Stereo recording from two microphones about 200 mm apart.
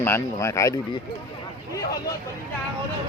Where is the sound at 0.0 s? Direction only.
15° left (ahead or behind).